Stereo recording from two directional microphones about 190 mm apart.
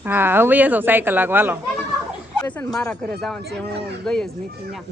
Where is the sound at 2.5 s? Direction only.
5° left (ahead or behind).